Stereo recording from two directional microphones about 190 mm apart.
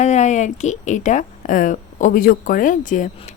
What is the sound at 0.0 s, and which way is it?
A woman's voice, 40° left (ahead or behind).